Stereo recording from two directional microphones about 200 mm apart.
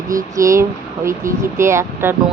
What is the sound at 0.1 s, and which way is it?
Speech, 15° right (ahead or behind).